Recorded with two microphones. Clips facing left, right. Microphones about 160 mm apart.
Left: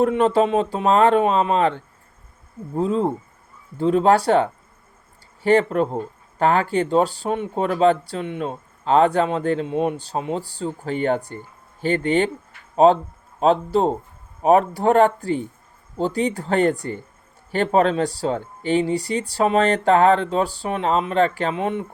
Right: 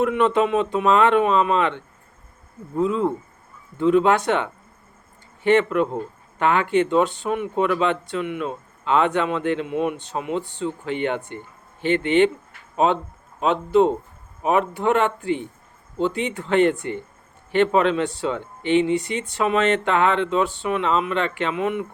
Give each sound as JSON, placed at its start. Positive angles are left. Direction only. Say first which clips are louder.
{"t": 0.0, "sound": "speech", "louder": "left 2 dB", "side_deg": 35}